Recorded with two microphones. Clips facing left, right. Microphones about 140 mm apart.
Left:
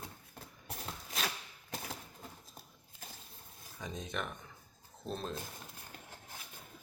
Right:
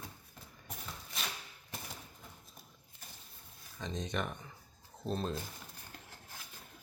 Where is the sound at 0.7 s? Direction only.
90° left.